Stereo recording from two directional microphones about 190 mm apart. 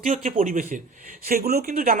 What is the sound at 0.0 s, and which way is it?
A man's voice, 40° right (ahead or behind).